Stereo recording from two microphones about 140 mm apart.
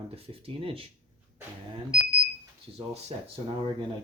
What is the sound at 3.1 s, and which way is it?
Speech, 45° right (ahead or behind).